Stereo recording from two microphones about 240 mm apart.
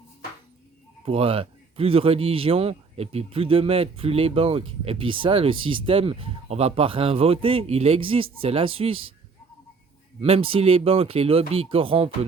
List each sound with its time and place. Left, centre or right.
1.0 s speech: right
10.2 s speech: right